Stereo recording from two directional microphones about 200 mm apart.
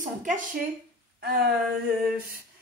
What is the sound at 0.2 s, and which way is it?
Speech, 40° right (ahead or behind).